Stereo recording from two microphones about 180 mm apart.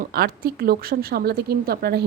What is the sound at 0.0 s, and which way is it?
Speech, 55° right (ahead or behind).